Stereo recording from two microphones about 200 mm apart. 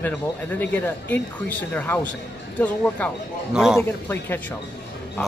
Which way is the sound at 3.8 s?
10° left (ahead or behind).